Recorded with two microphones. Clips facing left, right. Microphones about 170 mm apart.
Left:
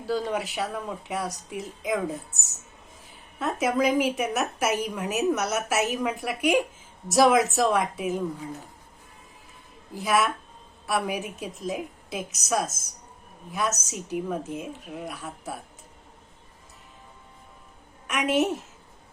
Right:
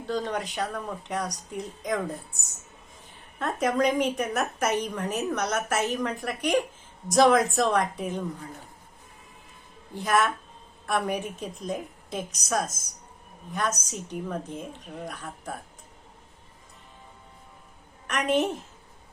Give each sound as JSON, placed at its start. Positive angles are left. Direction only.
{"t": 0.0, "sound": "speech", "side_deg": 5}
{"t": 3.3, "sound": "a woman's voice", "side_deg": 5}
{"t": 9.9, "sound": "speech", "side_deg": 5}
{"t": 18.1, "sound": "speech", "side_deg": 5}